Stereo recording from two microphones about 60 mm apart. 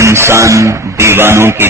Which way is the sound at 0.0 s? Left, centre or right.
Right.